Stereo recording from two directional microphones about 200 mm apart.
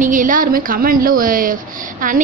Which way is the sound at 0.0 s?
40° right (ahead or behind).